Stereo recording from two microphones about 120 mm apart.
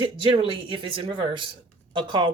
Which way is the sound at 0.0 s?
45° right (ahead or behind).